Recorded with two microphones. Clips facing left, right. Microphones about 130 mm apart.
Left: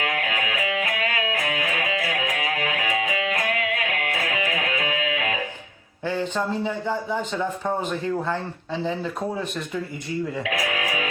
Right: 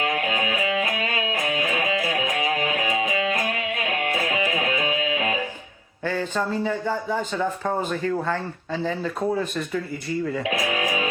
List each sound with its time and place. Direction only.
0.0 s music: 25° right (ahead or behind)
6.1 s speech: 15° left (ahead or behind)
10.4 s music: 25° right (ahead or behind)